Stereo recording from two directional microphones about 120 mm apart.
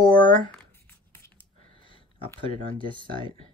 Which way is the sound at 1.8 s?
45° left (ahead or behind).